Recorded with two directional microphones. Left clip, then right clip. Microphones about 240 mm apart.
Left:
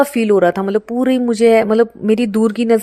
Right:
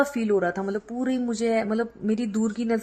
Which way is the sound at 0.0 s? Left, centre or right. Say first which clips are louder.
Left 11 dB; left.